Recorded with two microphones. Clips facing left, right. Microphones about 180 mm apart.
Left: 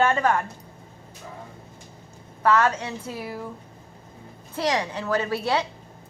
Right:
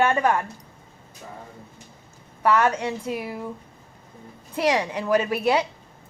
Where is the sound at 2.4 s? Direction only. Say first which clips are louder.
Right 1 dB; 10° right (ahead or behind).